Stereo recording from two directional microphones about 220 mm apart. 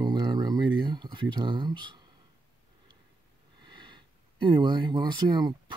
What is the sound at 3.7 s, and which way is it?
Speech, 20° right (ahead or behind).